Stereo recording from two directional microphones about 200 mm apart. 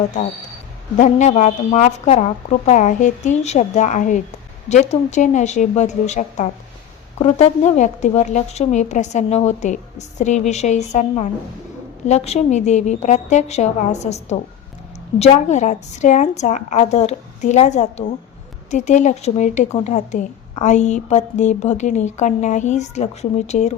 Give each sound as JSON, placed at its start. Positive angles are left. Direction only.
{"t": 0.9, "sound": "speech", "side_deg": 40}